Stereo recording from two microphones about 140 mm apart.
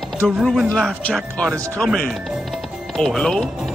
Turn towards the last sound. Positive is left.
turn(degrees=0)  # may be behind; listen again after turning